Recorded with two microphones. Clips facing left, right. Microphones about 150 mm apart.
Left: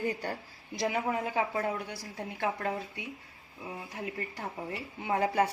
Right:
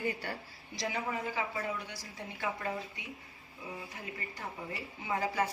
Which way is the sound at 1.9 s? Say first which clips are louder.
Left 5 dB; 60° left (ahead or behind).